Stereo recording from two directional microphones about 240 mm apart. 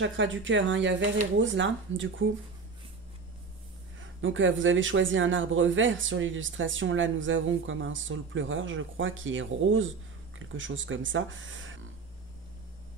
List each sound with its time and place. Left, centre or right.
0.0 s speech: right
4.0 s speech: right